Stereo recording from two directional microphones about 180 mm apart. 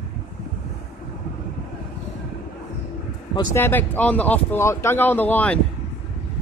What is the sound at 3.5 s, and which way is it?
Speech, 10° left (ahead or behind).